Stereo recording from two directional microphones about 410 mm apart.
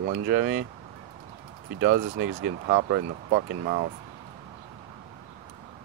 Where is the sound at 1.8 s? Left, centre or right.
Right.